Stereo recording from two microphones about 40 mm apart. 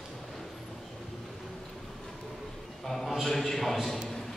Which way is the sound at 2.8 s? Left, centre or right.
Centre.